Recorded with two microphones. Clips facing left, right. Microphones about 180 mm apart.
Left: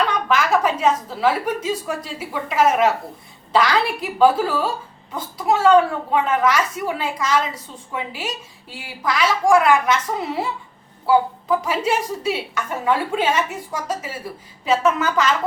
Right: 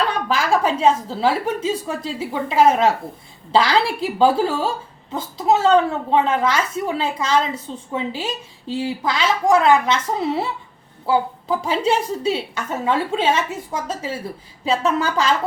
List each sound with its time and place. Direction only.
0.1 s a woman's voice: 30° right (ahead or behind)
11.4 s a woman's voice: 30° right (ahead or behind)